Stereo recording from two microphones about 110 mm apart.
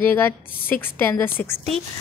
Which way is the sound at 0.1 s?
20° left (ahead or behind).